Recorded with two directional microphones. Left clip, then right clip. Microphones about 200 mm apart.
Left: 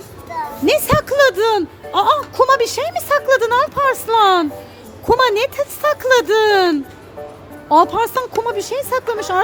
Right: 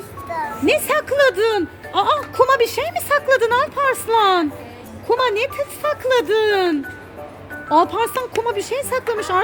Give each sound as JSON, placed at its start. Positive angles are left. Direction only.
{"t": 0.6, "sound": "music", "side_deg": 15}
{"t": 5.0, "sound": "speech", "side_deg": 20}